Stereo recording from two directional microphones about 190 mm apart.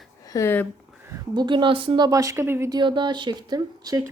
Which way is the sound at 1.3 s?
25° right (ahead or behind).